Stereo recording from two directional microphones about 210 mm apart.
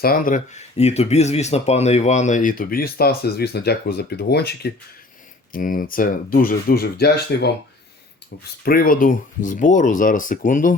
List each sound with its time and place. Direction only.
0.0 s speech: 40° left (ahead or behind)
8.6 s speech: 45° left (ahead or behind)